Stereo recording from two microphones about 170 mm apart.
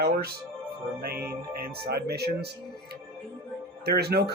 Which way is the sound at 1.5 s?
65° right (ahead or behind).